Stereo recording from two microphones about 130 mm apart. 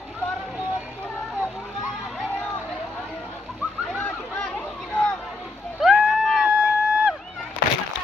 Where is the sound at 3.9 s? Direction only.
15° left (ahead or behind).